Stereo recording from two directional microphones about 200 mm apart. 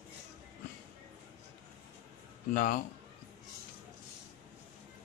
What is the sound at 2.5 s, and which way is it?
Speech, 45° left (ahead or behind).